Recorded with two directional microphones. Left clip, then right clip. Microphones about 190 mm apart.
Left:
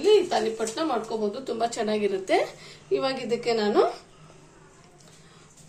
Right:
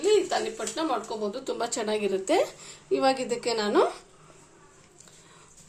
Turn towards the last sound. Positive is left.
turn(degrees=-50)  # may be behind; listen again after turning